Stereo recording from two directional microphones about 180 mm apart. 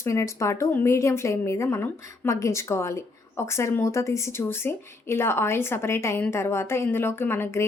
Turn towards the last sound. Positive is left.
turn(degrees=15)  # may be behind; listen again after turning